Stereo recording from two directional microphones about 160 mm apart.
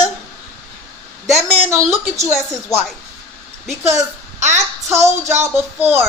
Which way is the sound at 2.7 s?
25° left (ahead or behind).